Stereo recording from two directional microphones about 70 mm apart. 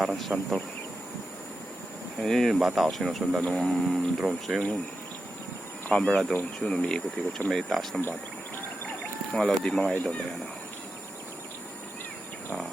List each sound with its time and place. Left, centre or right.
0.0 s speech: centre
2.1 s speech: centre
3.4 s speech: centre
3.7 s speech: centre
5.9 s speech: centre
9.3 s speech: centre